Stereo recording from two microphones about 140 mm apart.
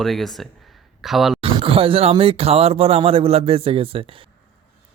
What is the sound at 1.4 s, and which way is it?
Speech, 40° right (ahead or behind).